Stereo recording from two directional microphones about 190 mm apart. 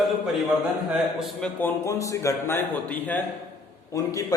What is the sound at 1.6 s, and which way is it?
A man's voice, 10° left (ahead or behind).